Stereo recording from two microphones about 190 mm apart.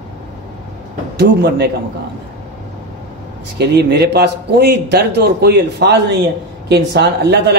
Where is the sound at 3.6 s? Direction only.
60° right (ahead or behind).